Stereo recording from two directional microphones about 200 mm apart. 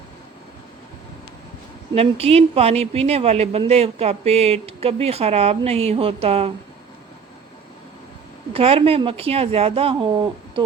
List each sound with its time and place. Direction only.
2.0 s a woman's voice: 30° right (ahead or behind)
8.5 s a woman's voice: 30° right (ahead or behind)